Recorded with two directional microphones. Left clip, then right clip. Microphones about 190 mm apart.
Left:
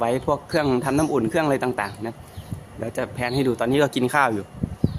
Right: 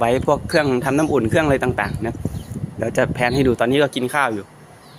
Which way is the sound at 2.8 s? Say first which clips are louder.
Right 8 dB; 25° right (ahead or behind).